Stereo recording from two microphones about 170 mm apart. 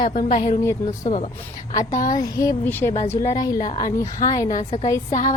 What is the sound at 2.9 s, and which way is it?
Speech, 40° left (ahead or behind).